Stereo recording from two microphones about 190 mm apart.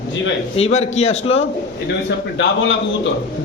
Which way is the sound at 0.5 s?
35° left (ahead or behind).